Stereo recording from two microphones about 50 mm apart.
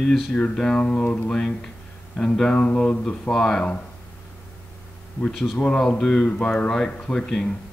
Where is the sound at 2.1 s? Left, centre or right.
Centre.